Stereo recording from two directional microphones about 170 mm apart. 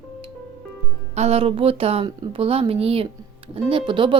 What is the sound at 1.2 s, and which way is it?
A woman's voice, 40° right (ahead or behind).